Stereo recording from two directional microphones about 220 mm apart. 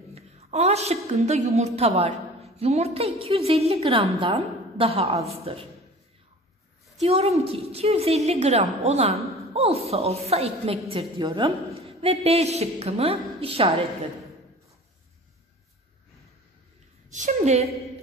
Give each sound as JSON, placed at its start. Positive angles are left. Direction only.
{"t": 0.1, "sound": "a woman's voice", "side_deg": -30}
{"t": 7.0, "sound": "a woman's voice", "side_deg": -30}
{"t": 17.1, "sound": "a woman's voice", "side_deg": -30}